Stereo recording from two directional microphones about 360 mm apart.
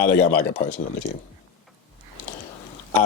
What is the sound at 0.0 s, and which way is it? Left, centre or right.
Speech, left.